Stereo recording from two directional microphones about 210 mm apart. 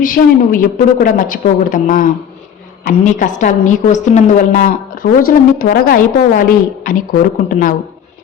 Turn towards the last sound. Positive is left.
turn(degrees=40)  # may be behind; listen again after turning